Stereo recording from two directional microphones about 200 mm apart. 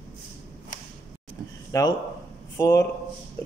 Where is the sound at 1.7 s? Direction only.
15° left (ahead or behind).